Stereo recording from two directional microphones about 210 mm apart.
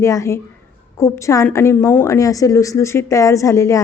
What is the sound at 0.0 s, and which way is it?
A woman's voice, 15° left (ahead or behind).